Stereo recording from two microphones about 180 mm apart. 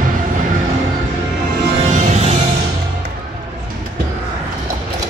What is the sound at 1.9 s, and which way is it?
Music, 40° right (ahead or behind).